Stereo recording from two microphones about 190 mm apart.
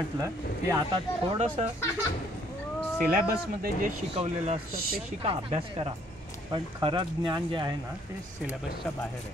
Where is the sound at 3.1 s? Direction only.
50° right (ahead or behind).